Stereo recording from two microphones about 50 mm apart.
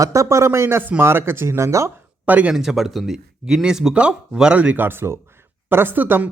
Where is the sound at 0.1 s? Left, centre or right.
Right.